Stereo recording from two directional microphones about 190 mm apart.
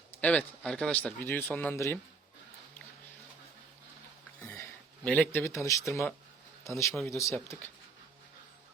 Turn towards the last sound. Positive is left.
turn(degrees=10)  # may be behind; listen again after turning